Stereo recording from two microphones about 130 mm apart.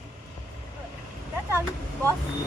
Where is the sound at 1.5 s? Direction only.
20° right (ahead or behind).